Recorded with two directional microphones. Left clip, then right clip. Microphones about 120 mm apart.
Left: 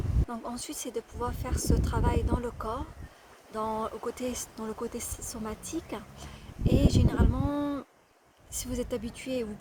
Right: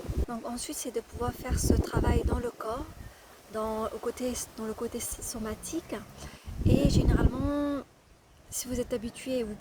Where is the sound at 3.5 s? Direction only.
10° left (ahead or behind).